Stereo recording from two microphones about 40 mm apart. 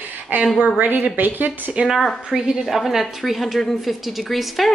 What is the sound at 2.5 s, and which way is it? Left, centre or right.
A woman's voice, centre.